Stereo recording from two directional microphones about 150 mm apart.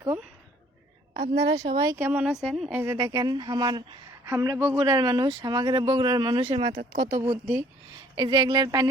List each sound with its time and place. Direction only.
1.3 s speech: 30° right (ahead or behind)
2.0 s speech: 10° right (ahead or behind)
2.8 s speech: 30° right (ahead or behind)
6.9 s speech: 25° right (ahead or behind)